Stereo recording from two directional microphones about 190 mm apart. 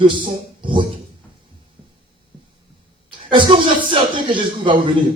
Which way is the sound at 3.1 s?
25° right (ahead or behind).